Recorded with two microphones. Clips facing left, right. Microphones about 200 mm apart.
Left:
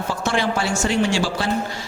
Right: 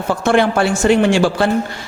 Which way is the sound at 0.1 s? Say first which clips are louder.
Right 9 dB; 55° right (ahead or behind).